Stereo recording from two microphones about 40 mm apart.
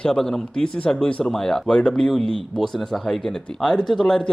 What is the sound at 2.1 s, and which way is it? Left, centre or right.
Speech, centre.